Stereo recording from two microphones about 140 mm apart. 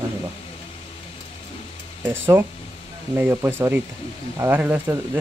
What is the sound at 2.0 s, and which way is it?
Speech, 15° right (ahead or behind).